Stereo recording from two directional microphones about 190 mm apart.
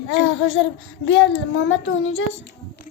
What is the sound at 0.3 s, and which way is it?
Child singing, 90° left.